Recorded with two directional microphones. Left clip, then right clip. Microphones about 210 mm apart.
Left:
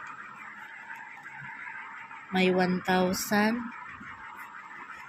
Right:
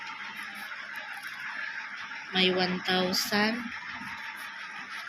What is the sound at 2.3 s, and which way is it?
Speech, 45° left (ahead or behind).